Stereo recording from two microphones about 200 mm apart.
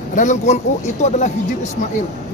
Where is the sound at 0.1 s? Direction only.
40° left (ahead or behind).